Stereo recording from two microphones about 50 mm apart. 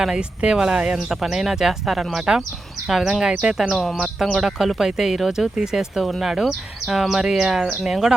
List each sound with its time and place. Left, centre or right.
0.2 s speech: centre
3.7 s speech: centre
4.4 s speech: centre